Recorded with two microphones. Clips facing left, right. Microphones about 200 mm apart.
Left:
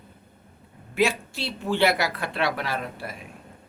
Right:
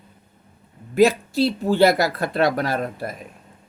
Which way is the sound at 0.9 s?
40° right (ahead or behind).